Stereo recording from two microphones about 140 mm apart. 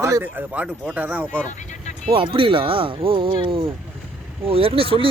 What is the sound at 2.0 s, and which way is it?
Speech, 40° right (ahead or behind).